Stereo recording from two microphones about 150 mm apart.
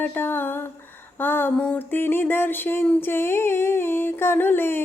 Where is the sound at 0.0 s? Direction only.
15° left (ahead or behind).